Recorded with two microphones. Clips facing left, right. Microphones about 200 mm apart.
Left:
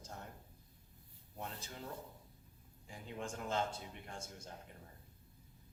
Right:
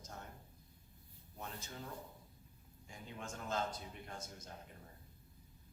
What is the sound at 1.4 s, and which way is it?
Speech, 35° left (ahead or behind).